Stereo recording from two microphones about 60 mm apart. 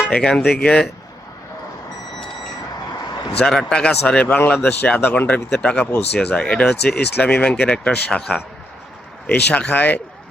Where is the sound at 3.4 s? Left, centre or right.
Centre.